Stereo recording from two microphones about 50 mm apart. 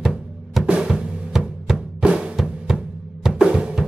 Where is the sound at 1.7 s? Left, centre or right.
Centre.